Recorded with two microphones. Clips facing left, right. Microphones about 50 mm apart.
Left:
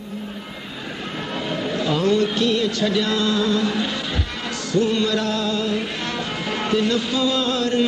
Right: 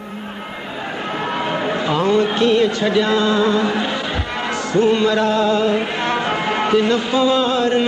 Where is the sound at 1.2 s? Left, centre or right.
Right.